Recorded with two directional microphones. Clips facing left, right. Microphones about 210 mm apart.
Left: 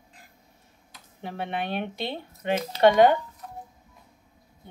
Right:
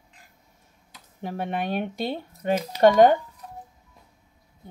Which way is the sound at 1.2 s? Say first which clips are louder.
Right 2 dB; 40° right (ahead or behind).